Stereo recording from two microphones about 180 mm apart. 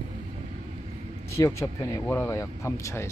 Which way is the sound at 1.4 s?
15° left (ahead or behind).